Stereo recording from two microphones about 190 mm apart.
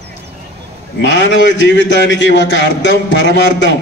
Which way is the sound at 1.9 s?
70° left (ahead or behind).